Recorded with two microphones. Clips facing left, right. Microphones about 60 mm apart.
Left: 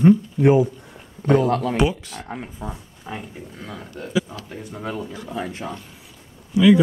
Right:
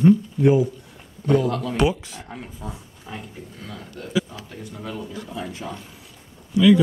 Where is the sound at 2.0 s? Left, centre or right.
Centre.